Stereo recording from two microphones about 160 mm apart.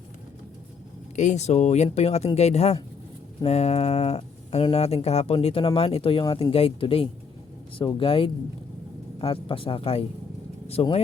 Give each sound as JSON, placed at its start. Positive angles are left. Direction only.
{"t": 1.1, "sound": "speech", "side_deg": 50}